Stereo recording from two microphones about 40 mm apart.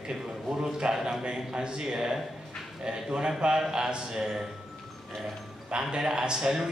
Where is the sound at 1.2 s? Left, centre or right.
Right.